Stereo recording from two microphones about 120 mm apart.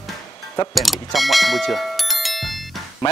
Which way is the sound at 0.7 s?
Centre (ahead or behind).